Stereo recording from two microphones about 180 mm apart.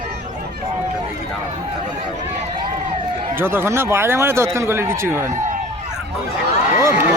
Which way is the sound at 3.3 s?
15° right (ahead or behind).